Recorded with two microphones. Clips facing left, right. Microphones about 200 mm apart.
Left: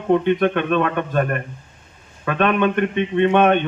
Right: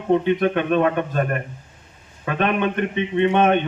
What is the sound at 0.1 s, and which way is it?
A man's voice, 55° left (ahead or behind).